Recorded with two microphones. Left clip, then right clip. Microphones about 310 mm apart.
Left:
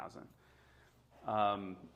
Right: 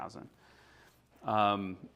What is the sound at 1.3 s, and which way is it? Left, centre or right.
Speech, right.